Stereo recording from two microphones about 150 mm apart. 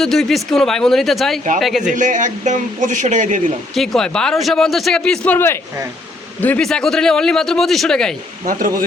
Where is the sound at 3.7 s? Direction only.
Centre (ahead or behind).